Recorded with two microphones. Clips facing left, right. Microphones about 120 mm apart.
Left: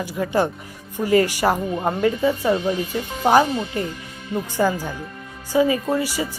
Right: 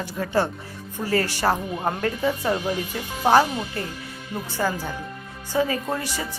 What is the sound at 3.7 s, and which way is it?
Speech, 15° left (ahead or behind).